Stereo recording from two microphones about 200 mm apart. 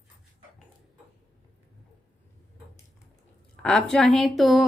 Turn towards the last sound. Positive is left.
turn(degrees=0)  # may be behind; listen again after turning